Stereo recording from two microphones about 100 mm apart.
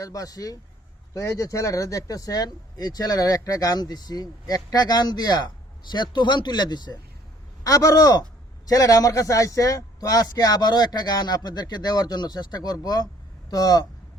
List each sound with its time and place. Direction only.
0.0 s a man's voice: 35° left (ahead or behind)
7.6 s a man's voice: 35° left (ahead or behind)